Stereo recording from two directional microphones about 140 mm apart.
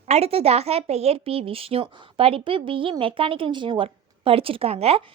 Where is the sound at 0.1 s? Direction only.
45° right (ahead or behind).